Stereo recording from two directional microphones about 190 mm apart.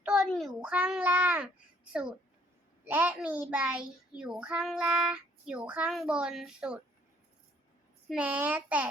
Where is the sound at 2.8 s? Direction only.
10° right (ahead or behind).